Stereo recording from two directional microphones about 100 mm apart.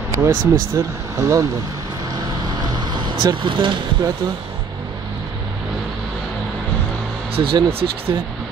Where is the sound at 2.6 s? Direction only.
45° right (ahead or behind).